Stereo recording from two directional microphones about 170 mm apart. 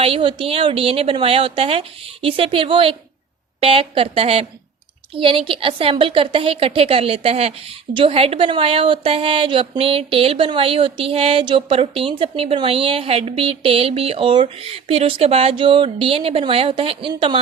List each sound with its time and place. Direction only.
0.0 s a woman's voice: 30° right (ahead or behind)